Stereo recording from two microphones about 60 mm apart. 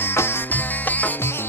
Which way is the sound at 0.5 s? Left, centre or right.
Left.